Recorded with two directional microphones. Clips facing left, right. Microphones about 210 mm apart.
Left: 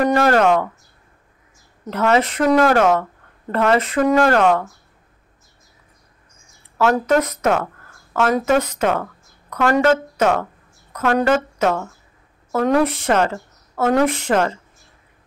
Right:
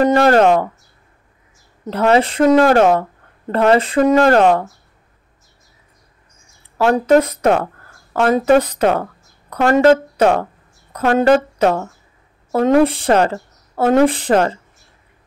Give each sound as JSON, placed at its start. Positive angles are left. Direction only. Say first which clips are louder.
{"t": 0.0, "sound": "a sound", "louder": "right 4 dB", "side_deg": -30}
{"t": 1.9, "sound": "speech", "louder": "right 3 dB", "side_deg": -30}
{"t": 6.8, "sound": "a woman's voice", "louder": "right 4 dB", "side_deg": -30}